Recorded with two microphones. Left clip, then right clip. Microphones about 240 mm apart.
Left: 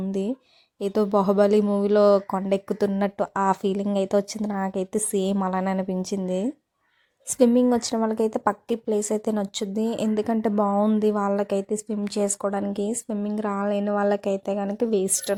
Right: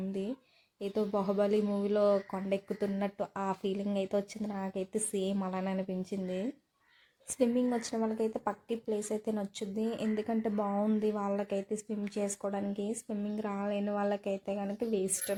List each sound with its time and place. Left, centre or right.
0.1 s a woman's voice: left